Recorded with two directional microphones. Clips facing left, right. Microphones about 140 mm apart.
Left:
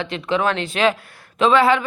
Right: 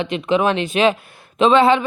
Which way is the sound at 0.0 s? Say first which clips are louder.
Right 3 dB; 20° right (ahead or behind).